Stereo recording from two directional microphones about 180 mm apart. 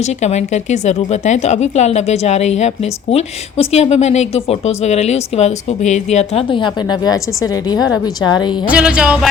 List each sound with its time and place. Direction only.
0.0 s a woman's voice: 40° left (ahead or behind); by 8.5 s 25° left (ahead or behind)
8.6 s speech: 5° right (ahead or behind)